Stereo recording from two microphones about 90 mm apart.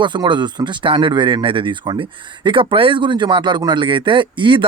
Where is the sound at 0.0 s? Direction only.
60° right (ahead or behind).